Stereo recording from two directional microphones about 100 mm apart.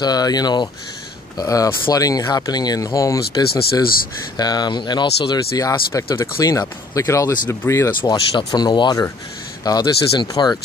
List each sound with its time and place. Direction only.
0.0 s speech: 40° left (ahead or behind); by 7.9 s 25° left (ahead or behind)
8.0 s speech: 55° left (ahead or behind)
8.5 s speech: 45° left (ahead or behind)